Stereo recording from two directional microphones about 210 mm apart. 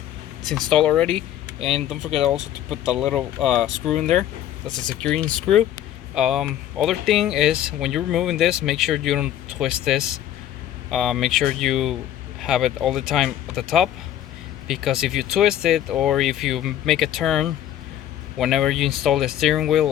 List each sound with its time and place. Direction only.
0.4 s speech: centre (ahead or behind)
1.5 s speech: 30° right (ahead or behind)
1.9 s speech: centre (ahead or behind)